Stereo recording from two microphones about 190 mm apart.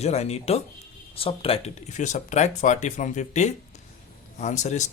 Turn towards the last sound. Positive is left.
turn(degrees=40)  # may be behind; listen again after turning